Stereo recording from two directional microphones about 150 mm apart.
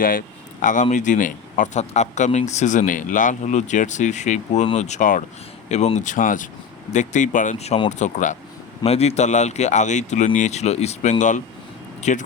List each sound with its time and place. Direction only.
0.0 s speech: 65° left (ahead or behind)
5.6 s speech: 50° left (ahead or behind)